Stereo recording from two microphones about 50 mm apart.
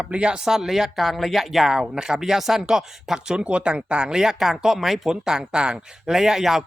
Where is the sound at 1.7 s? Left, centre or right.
Centre.